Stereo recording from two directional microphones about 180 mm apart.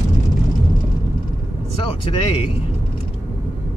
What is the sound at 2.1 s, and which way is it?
Speech, 30° left (ahead or behind).